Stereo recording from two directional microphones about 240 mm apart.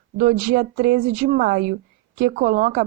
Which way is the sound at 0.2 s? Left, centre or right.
Right.